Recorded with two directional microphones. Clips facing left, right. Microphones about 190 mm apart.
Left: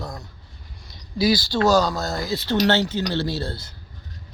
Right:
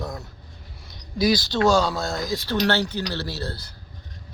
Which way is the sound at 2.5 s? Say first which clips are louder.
Left 4 dB; 25° left (ahead or behind).